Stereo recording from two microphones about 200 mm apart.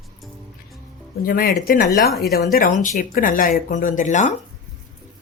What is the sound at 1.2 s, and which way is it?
Speech, 45° left (ahead or behind).